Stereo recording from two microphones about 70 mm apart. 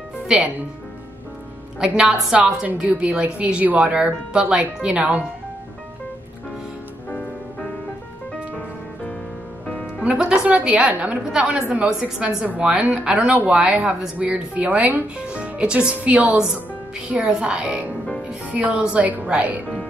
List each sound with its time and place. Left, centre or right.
0.3 s speech: centre
1.8 s speech: centre
7.1 s music: centre
9.7 s music: centre
10.0 s speech: centre
11.2 s speech: centre